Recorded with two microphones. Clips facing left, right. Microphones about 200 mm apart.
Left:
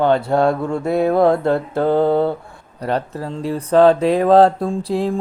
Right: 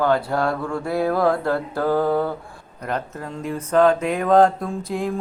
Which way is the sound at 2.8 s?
35° left (ahead or behind).